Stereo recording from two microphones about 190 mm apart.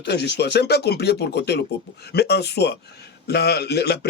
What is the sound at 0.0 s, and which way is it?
Speech, 60° left (ahead or behind).